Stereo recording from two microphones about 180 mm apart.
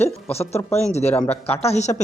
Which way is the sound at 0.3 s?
35° left (ahead or behind).